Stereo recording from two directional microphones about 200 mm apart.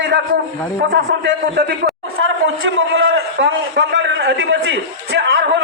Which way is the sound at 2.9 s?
75° right (ahead or behind).